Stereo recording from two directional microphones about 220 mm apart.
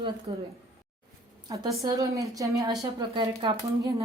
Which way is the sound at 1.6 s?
15° right (ahead or behind).